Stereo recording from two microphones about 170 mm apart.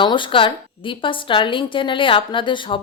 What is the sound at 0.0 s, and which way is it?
A woman's voice, 30° left (ahead or behind).